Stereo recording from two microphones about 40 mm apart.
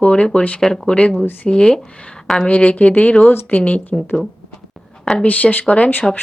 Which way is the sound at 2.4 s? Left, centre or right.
Left.